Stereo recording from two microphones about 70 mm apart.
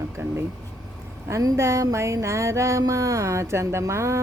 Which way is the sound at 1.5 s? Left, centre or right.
Right.